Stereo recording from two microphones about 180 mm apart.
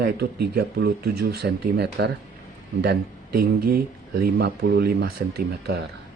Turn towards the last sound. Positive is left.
turn(degrees=-60)  # may be behind; listen again after turning